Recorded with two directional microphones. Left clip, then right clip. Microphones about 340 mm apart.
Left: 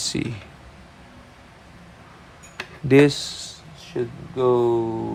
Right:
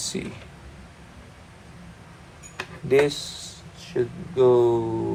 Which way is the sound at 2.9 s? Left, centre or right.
Left.